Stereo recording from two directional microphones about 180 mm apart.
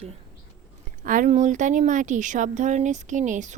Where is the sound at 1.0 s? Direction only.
45° right (ahead or behind).